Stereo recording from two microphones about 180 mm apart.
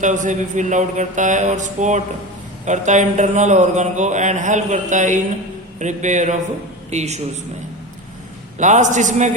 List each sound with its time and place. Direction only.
0.0 s a man's voice: 45° right (ahead or behind)
8.5 s speech: 40° right (ahead or behind)